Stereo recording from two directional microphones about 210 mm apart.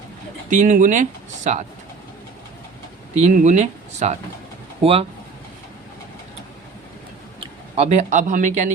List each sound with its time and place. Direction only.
0.5 s speech: 40° right (ahead or behind)
3.2 s speech: 35° right (ahead or behind)
7.3 s speech: 30° right (ahead or behind)